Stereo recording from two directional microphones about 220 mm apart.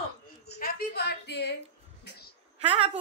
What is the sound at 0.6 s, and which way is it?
Speech, 45° left (ahead or behind).